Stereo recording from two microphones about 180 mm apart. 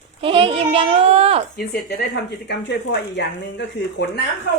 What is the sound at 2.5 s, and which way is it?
Speech, 70° left (ahead or behind).